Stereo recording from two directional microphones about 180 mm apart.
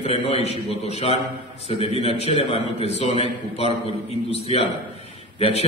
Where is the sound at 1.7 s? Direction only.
35° left (ahead or behind).